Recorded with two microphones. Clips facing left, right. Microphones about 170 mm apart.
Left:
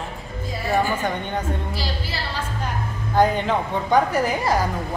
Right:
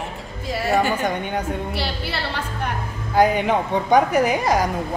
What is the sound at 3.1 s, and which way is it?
A woman's voice, 10° right (ahead or behind).